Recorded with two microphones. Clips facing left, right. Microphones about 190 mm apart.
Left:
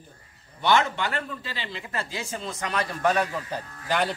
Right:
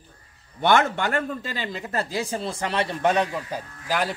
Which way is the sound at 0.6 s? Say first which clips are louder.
Right 3 dB; 50° right (ahead or behind).